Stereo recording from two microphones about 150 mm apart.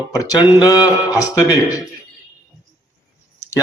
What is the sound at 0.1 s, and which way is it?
A man's voice, 25° left (ahead or behind).